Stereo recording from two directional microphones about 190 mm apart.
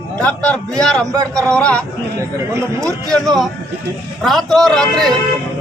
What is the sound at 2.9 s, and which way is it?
A man's voice, centre (ahead or behind).